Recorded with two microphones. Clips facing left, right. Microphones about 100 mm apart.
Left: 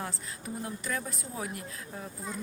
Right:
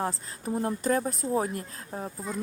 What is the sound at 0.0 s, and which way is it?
Speech, 35° right (ahead or behind).